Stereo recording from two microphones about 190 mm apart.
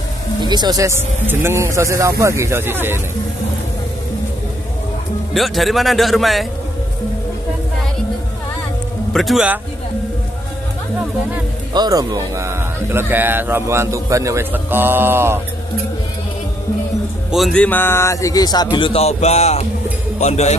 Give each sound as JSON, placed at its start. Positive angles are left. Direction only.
{"t": 0.4, "sound": "speech", "side_deg": -20}
{"t": 5.3, "sound": "a man's voice", "side_deg": 0}
{"t": 9.1, "sound": "a man's voice", "side_deg": 0}
{"t": 11.7, "sound": "speech", "side_deg": -20}
{"t": 17.3, "sound": "a man's voice", "side_deg": 0}